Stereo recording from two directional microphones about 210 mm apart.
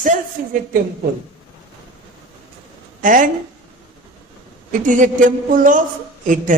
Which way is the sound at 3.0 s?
40° right (ahead or behind).